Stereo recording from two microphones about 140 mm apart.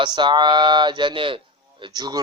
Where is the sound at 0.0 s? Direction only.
35° right (ahead or behind).